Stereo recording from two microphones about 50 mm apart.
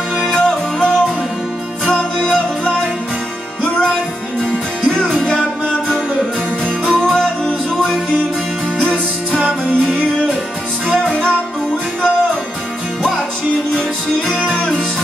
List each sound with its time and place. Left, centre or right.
0.3 s music: centre
3.8 s music: centre
6.6 s music: centre
8.8 s music: centre
11.1 s music: centre